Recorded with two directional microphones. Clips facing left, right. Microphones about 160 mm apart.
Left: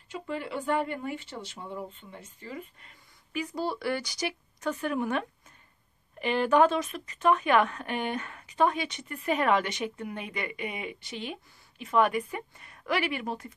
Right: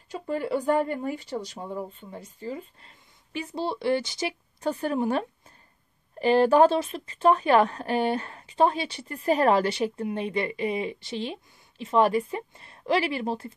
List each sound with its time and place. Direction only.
0.1 s a woman's voice: 40° right (ahead or behind)